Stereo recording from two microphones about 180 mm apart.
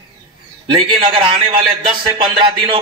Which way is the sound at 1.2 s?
30° right (ahead or behind).